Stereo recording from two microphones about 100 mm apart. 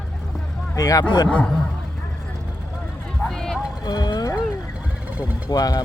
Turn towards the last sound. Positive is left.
turn(degrees=40)  # may be behind; listen again after turning